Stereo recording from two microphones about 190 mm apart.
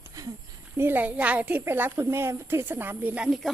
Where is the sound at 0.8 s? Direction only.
10° right (ahead or behind).